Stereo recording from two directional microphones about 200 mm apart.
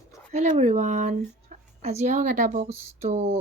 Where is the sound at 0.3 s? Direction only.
35° right (ahead or behind).